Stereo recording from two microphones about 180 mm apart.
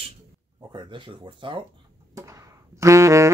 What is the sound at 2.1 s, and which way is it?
Music, 20° right (ahead or behind).